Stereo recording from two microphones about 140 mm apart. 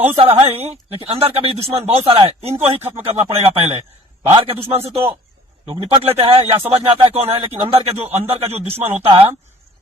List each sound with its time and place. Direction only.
0.2 s a man's voice: 45° right (ahead or behind)